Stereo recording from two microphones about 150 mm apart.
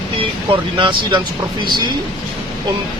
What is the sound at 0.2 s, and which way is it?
Speech, 35° right (ahead or behind).